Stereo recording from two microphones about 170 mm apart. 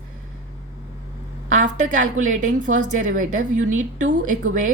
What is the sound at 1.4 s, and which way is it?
A woman's voice, 50° right (ahead or behind).